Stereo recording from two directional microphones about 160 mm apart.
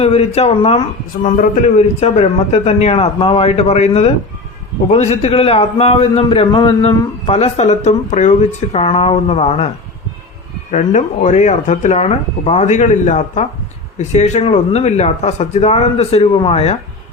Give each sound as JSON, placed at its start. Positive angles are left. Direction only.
{"t": 0.0, "sound": "a man's voice", "side_deg": 40}
{"t": 10.7, "sound": "a man's voice", "side_deg": 50}